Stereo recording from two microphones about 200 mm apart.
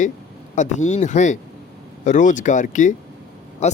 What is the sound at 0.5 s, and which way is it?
Speech, 35° left (ahead or behind).